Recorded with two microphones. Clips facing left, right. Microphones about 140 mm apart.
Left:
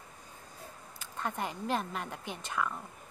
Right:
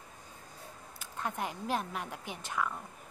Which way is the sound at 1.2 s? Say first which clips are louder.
Left 1 dB; 5° right (ahead or behind).